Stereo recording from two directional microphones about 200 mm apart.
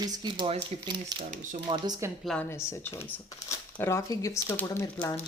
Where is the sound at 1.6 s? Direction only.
20° right (ahead or behind).